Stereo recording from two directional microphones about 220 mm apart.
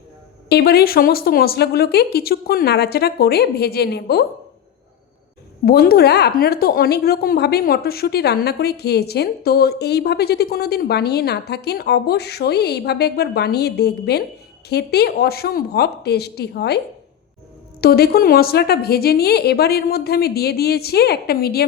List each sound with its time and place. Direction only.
0.4 s a woman's voice: 45° left (ahead or behind)
5.6 s a woman's voice: 45° left (ahead or behind)